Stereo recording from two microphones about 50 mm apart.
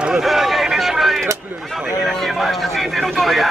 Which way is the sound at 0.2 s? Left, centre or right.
Centre.